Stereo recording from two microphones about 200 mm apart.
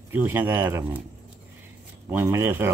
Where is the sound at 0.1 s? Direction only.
10° right (ahead or behind).